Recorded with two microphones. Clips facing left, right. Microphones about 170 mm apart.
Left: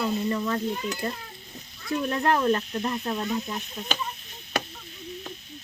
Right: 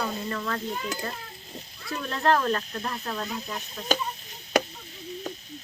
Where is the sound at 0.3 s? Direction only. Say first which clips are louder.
Left 4 dB; 20° left (ahead or behind).